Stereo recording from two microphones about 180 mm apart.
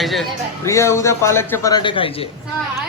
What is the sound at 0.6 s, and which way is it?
A man's voice, 15° left (ahead or behind).